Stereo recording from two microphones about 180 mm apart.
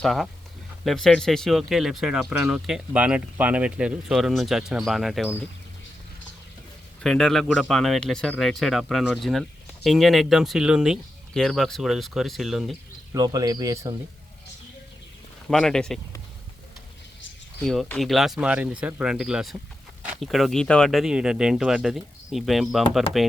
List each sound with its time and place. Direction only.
0.0 s speech: centre (ahead or behind)
7.0 s speech: 5° left (ahead or behind)
13.1 s speech: 20° right (ahead or behind)
15.4 s speech: 5° left (ahead or behind)
17.6 s speech: centre (ahead or behind)